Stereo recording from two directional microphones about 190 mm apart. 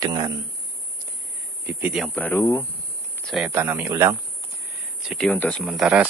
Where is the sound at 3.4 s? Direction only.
10° right (ahead or behind).